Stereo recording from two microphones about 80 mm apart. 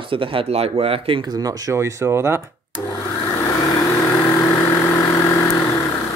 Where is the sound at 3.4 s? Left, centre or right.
Left.